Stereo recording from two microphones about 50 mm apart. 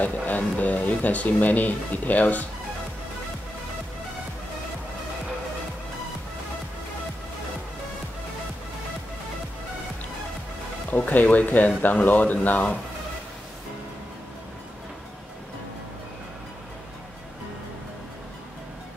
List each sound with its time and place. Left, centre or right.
0.0 s speech: left
10.9 s speech: left